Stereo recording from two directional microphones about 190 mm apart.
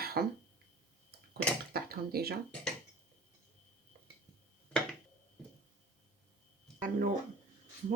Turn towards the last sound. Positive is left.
turn(degrees=-45)  # may be behind; listen again after turning